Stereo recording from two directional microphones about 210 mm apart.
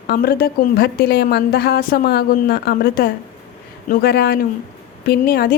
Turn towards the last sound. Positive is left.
turn(degrees=45)  # may be behind; listen again after turning